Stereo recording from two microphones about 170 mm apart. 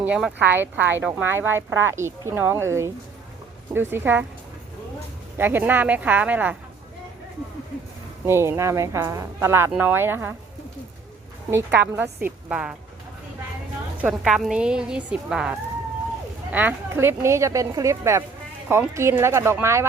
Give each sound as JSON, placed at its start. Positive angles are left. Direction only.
{"t": 0.0, "sound": "speech", "side_deg": -5}
{"t": 5.4, "sound": "speech", "side_deg": -10}
{"t": 8.3, "sound": "speech", "side_deg": -15}
{"t": 11.9, "sound": "speech", "side_deg": -10}
{"t": 14.0, "sound": "speech", "side_deg": -5}